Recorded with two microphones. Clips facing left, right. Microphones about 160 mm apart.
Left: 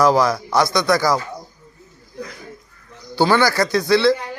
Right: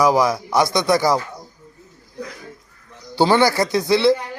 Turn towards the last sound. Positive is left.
turn(degrees=-20)  # may be behind; listen again after turning